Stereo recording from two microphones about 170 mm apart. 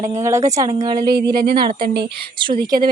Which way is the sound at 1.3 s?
65° right (ahead or behind).